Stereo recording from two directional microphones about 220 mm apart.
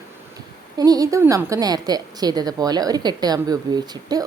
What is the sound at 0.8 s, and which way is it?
A woman's voice, 15° right (ahead or behind).